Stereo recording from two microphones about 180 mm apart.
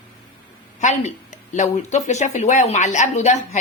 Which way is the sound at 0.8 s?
40° left (ahead or behind).